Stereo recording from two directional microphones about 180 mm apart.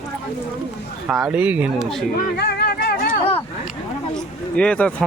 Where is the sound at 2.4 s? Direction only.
65° left (ahead or behind).